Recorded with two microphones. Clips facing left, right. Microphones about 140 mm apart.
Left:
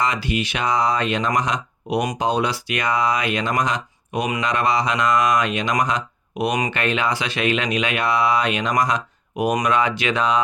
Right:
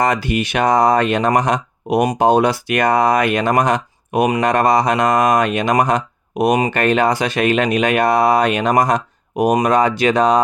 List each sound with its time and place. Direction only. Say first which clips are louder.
0.0 s speech: right 5 dB; 50° right (ahead or behind)